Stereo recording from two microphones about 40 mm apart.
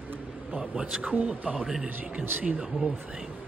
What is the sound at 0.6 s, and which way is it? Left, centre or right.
Speech, centre.